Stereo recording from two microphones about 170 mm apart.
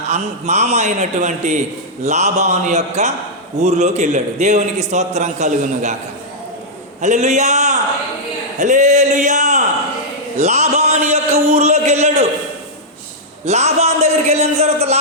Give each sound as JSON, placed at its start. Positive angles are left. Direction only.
{"t": 0.1, "sound": "a man's voice", "side_deg": -40}
{"t": 7.0, "sound": "a man's voice", "side_deg": -40}
{"t": 13.4, "sound": "a man's voice", "side_deg": -40}